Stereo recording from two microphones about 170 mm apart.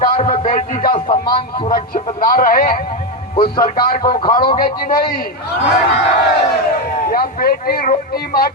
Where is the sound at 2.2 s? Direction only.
55° left (ahead or behind).